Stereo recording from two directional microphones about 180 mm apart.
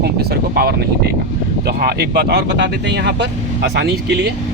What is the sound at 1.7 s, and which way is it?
Speech, 60° right (ahead or behind).